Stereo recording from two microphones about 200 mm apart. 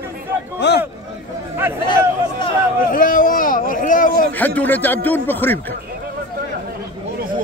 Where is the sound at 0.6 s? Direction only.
60° left (ahead or behind).